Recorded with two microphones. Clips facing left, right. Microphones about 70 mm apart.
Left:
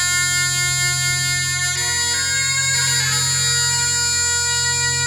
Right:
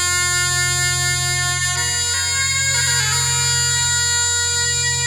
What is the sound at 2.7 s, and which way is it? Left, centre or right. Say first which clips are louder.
Music: right 1 dB; right.